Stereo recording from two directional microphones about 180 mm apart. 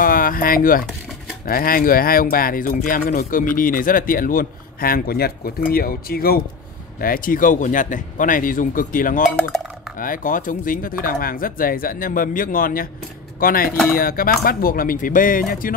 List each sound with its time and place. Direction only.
0.0 s speech: 50° left (ahead or behind)